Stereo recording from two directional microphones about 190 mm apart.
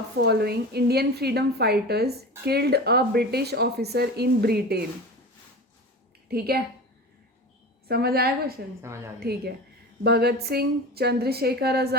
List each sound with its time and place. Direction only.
0.2 s speech: 55° right (ahead or behind)
6.2 s a woman's voice: 55° right (ahead or behind)
7.9 s a woman's voice: 55° right (ahead or behind)